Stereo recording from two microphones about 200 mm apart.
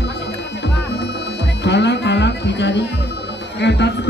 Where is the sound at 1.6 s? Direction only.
60° left (ahead or behind).